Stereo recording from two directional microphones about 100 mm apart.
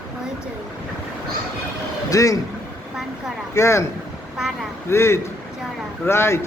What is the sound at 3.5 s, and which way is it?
Speech, 30° left (ahead or behind).